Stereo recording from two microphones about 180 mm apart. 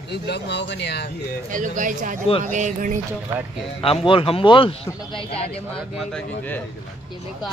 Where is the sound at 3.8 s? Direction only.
30° left (ahead or behind).